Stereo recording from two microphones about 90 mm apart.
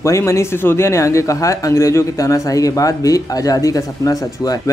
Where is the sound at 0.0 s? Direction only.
35° left (ahead or behind).